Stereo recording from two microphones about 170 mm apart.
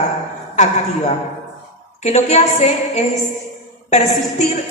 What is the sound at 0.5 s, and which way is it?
A woman's voice, 45° left (ahead or behind).